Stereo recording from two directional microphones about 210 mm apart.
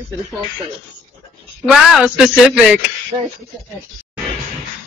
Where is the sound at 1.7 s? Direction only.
Centre (ahead or behind).